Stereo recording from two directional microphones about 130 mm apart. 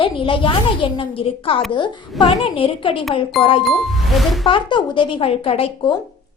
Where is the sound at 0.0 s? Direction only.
40° left (ahead or behind).